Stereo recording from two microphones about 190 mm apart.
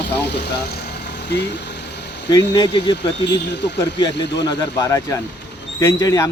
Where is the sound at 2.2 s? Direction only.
20° left (ahead or behind).